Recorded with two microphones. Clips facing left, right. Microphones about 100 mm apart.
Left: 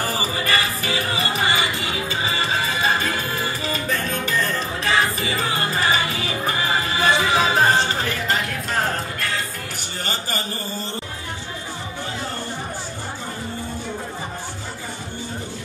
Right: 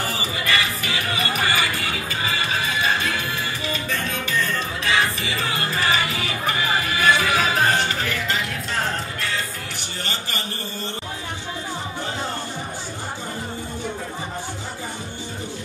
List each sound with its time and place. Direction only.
0.0 s music: 40° left (ahead or behind)